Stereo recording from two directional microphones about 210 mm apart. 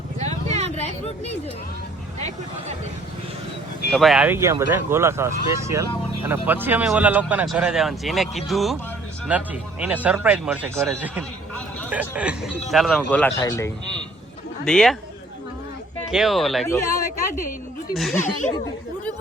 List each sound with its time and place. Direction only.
0.2 s vehicle: 30° right (ahead or behind)
0.8 s speech: 30° left (ahead or behind)
3.9 s speech: centre (ahead or behind)
11.2 s a sound: 5° left (ahead or behind)
11.9 s a man's voice: 5° right (ahead or behind); by 13.7 s 15° left (ahead or behind)
14.6 s speech: 5° left (ahead or behind)
16.1 s speech: centre (ahead or behind)
16.6 s a man's voice: 15° left (ahead or behind)
17.9 s speech: centre (ahead or behind)